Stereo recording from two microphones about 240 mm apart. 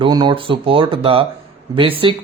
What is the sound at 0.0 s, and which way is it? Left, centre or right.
Speech, centre.